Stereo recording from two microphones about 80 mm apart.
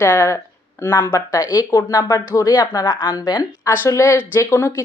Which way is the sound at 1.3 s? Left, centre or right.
Left.